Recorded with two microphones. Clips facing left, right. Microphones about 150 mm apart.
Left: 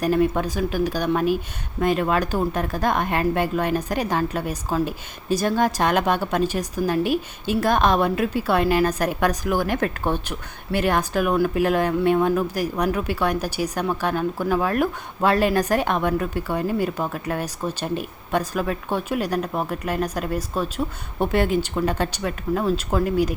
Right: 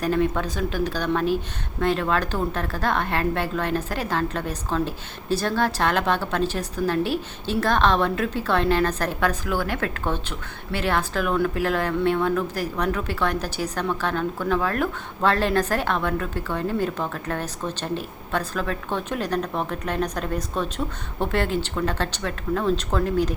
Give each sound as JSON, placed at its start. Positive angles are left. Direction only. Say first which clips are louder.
{"t": 0.0, "sound": "speech", "louder": "left 3 dB", "side_deg": 15}